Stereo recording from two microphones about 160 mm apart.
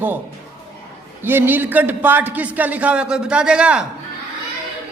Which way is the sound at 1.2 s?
10° right (ahead or behind).